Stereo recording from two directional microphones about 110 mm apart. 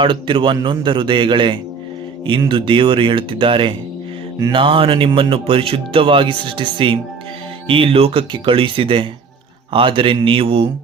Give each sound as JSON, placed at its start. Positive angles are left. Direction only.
{"t": 0.0, "sound": "speech", "side_deg": -50}